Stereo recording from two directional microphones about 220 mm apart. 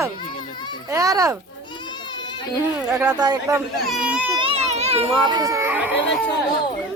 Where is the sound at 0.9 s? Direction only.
15° right (ahead or behind).